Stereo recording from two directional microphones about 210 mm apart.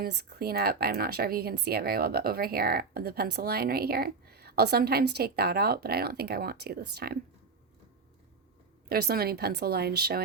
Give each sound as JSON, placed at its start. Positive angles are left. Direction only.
{"t": 0.0, "sound": "speech", "side_deg": -50}
{"t": 8.9, "sound": "speech", "side_deg": -45}